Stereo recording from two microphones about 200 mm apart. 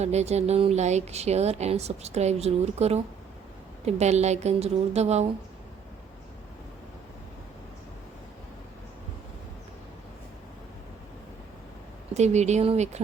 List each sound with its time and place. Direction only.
0.0 s speech: 35° right (ahead or behind)
12.1 s speech: 35° right (ahead or behind)